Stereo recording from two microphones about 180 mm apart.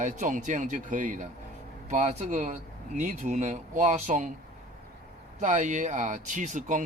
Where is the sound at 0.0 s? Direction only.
45° right (ahead or behind).